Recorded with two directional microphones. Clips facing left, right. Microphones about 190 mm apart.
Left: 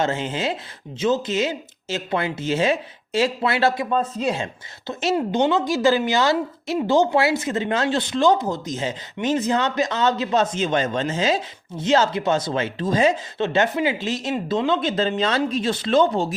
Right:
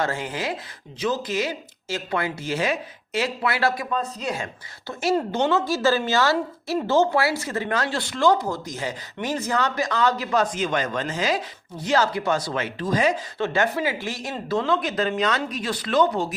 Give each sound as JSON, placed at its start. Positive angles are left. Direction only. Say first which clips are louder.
{"t": 0.0, "sound": "speech", "louder": "left 3 dB", "side_deg": 20}